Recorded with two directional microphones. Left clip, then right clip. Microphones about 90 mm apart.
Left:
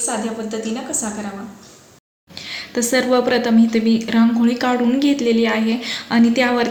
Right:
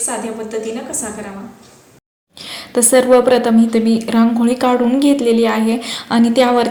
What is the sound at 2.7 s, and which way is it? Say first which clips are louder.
A woman's voice: right 6 dB; 30° right (ahead or behind).